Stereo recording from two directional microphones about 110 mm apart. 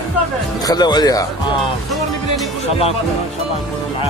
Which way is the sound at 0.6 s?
40° left (ahead or behind).